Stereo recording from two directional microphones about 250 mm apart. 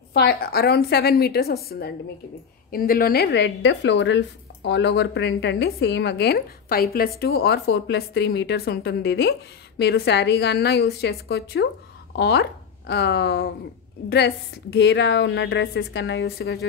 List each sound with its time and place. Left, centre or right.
0.1 s a woman's voice: left